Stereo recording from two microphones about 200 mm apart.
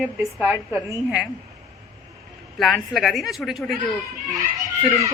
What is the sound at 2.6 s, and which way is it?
Speech, centre (ahead or behind).